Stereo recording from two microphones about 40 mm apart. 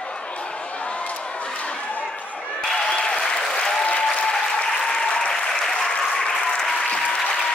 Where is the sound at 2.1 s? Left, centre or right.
Left.